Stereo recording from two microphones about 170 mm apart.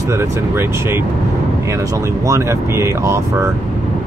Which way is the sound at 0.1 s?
15° right (ahead or behind).